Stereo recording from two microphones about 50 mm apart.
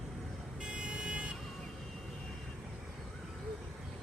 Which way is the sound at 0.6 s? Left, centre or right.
Centre.